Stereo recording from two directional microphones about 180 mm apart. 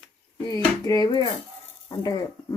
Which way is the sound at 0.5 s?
20° left (ahead or behind).